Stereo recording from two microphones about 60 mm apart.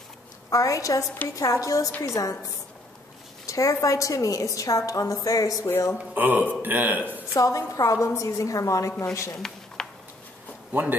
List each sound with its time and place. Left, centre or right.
0.5 s a woman's voice: left
3.4 s a woman's voice: left
5.9 s speech: right
7.3 s a woman's voice: left
9.8 s a sound: centre
10.7 s speech: right